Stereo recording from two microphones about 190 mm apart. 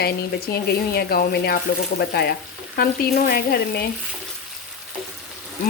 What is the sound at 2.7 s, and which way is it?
Frying, 55° left (ahead or behind).